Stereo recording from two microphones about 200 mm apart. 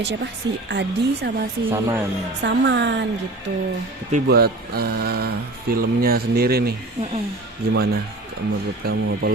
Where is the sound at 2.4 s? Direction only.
60° right (ahead or behind).